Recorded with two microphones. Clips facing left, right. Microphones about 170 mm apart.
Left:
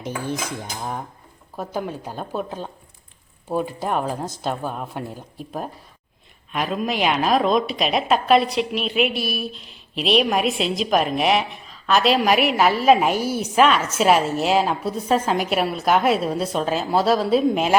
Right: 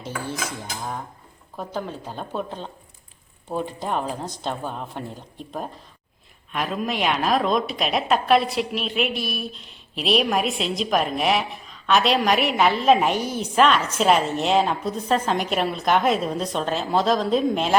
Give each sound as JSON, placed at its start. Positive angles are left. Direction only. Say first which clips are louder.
{"t": 0.0, "sound": "speech", "louder": "left 4 dB", "side_deg": 15}
{"t": 1.5, "sound": "a woman's voice", "louder": "left 2 dB", "side_deg": 10}